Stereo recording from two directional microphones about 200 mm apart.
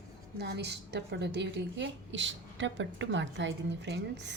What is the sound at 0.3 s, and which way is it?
A woman's voice, 55° right (ahead or behind).